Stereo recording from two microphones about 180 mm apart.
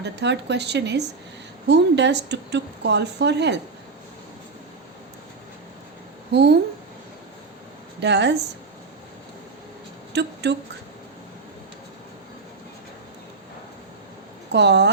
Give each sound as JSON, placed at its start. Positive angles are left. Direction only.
{"t": 0.0, "sound": "a woman's voice", "side_deg": -75}
{"t": 6.3, "sound": "a woman's voice", "side_deg": -65}
{"t": 8.0, "sound": "a woman's voice", "side_deg": -70}
{"t": 10.1, "sound": "speech", "side_deg": -70}
{"t": 14.5, "sound": "a woman's voice", "side_deg": -70}